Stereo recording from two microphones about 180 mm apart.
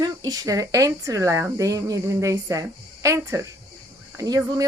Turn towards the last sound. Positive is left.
turn(degrees=-20)  # may be behind; listen again after turning